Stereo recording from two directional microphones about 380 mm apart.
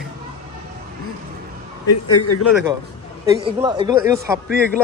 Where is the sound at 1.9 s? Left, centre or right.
Left.